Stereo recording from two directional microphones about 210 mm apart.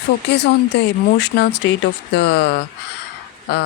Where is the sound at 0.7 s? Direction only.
55° left (ahead or behind).